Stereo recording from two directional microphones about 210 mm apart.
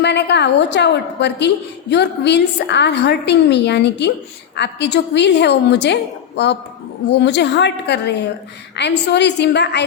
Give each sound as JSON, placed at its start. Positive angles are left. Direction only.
{"t": 0.0, "sound": "a woman's voice", "side_deg": 55}